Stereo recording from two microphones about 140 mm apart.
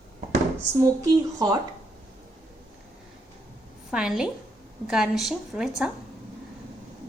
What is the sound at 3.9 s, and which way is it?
A woman's voice, 5° right (ahead or behind).